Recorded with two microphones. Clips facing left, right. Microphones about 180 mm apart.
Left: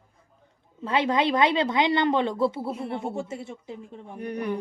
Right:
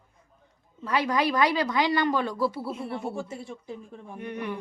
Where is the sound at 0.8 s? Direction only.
25° left (ahead or behind).